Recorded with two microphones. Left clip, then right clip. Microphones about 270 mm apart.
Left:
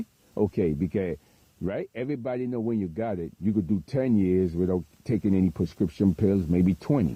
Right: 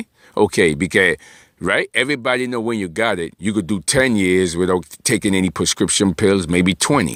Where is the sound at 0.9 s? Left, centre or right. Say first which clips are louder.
Right 15 dB; centre.